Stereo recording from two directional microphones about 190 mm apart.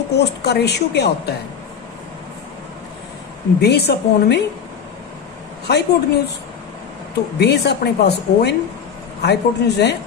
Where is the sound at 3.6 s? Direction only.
60° left (ahead or behind).